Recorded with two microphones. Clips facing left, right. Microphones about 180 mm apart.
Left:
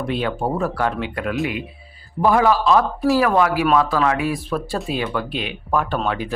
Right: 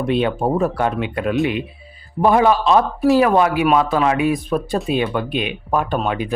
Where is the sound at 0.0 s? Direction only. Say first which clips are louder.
Right 4 dB; 20° right (ahead or behind).